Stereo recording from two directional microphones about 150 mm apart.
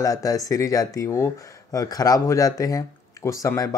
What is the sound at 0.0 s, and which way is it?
Speech, 25° left (ahead or behind).